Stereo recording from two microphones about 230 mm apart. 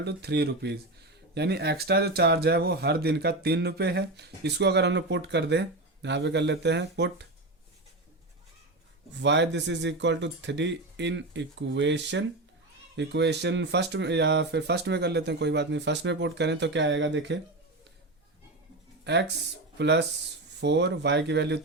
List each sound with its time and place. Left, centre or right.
0.0 s speech: right
9.2 s speech: right
19.8 s speech: right